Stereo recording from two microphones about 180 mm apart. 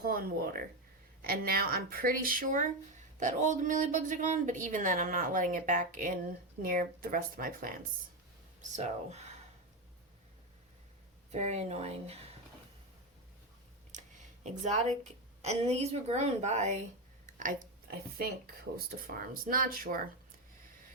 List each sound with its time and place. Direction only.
0.0 s speech: 55° right (ahead or behind)
8.7 s speech: 40° right (ahead or behind)
11.3 s speech: 40° right (ahead or behind)
13.9 s speech: 40° right (ahead or behind)
19.0 s speech: 50° right (ahead or behind)